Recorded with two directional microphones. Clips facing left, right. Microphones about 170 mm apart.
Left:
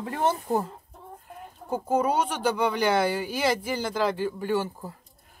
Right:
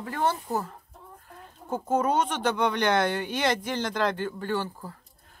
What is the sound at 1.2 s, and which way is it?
Speech, 10° left (ahead or behind).